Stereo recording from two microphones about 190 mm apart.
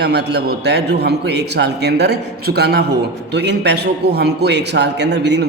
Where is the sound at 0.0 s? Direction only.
60° right (ahead or behind).